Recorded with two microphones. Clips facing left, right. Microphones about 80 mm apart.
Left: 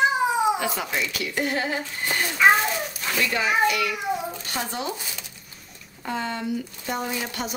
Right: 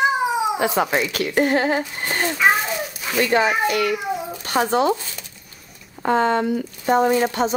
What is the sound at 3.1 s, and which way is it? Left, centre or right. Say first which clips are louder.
A child's voice: right 5 dB; right.